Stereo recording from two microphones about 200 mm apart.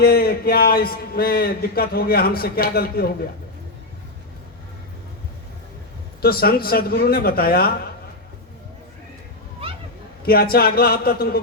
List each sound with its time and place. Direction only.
0.0 s a man's voice: 50° left (ahead or behind)
6.2 s a man's voice: 50° left (ahead or behind)
10.2 s a man's voice: 50° left (ahead or behind)